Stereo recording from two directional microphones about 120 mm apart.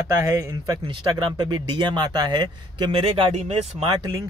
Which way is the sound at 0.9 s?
35° right (ahead or behind).